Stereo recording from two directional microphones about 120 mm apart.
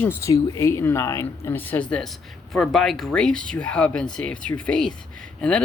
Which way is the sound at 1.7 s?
10° left (ahead or behind).